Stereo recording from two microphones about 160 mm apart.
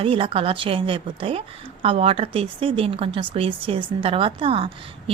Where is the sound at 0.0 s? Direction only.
35° right (ahead or behind).